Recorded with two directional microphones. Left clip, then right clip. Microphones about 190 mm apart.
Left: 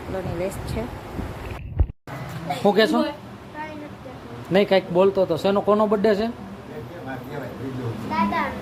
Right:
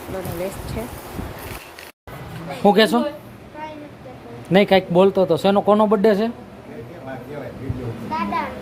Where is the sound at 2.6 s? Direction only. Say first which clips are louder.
Right 4 dB; 25° right (ahead or behind).